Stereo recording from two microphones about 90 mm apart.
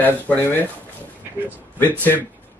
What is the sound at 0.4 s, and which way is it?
Speech, 25° left (ahead or behind).